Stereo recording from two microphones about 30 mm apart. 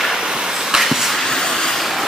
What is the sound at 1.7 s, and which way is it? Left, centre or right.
Vehicle, centre.